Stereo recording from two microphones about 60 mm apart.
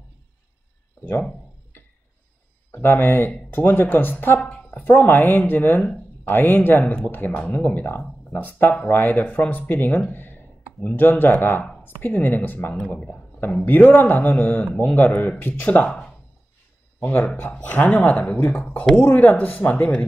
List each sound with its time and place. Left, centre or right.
2.7 s speech: left
4.4 s a man's voice: left
17.4 s a man's voice: left